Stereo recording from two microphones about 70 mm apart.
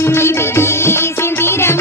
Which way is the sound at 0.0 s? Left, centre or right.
Left.